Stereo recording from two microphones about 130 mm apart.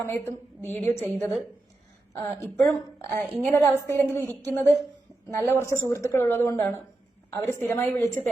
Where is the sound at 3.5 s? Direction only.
20° left (ahead or behind).